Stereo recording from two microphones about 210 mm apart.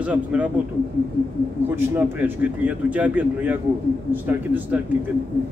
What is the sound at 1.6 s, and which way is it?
A man's voice, 10° right (ahead or behind).